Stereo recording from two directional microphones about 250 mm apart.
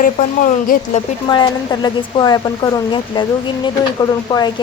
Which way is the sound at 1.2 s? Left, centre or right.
Centre.